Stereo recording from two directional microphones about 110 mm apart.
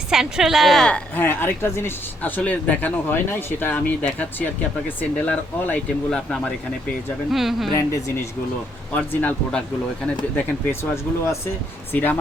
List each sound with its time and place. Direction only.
0.1 s a woman's voice: 5° right (ahead or behind)
7.3 s speech: centre (ahead or behind)
7.8 s speech: 25° left (ahead or behind)
9.0 s a woman's voice: 10° left (ahead or behind)